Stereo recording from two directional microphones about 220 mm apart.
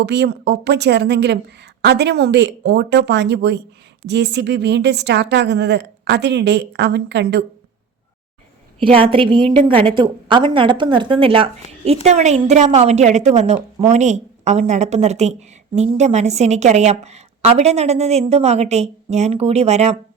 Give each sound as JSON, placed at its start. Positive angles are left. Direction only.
{"t": 0.0, "sound": "a woman's voice", "side_deg": -50}
{"t": 8.8, "sound": "a woman's voice", "side_deg": -25}